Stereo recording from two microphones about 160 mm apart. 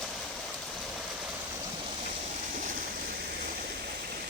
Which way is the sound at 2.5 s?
60° right (ahead or behind).